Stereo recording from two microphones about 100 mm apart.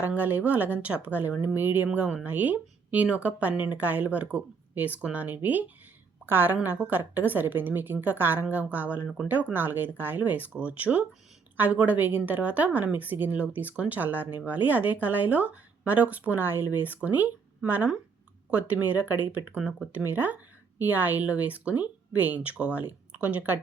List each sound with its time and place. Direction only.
0.0 s a woman's voice: 20° right (ahead or behind)